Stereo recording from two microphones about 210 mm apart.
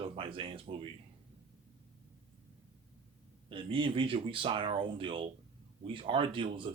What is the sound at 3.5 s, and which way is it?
Speech, 25° right (ahead or behind).